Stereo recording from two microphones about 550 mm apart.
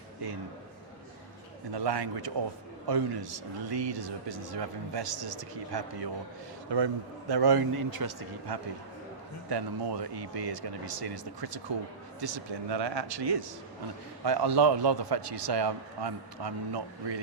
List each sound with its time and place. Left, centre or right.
1.7 s a man's voice: right